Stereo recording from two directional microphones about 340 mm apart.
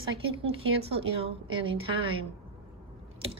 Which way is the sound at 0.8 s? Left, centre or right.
Centre.